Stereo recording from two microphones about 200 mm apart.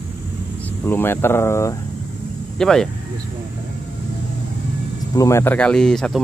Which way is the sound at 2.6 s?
5° left (ahead or behind).